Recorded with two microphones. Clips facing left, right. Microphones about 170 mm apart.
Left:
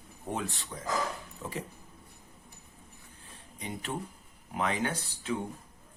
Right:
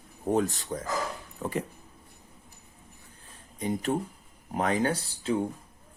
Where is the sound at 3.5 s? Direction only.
40° right (ahead or behind).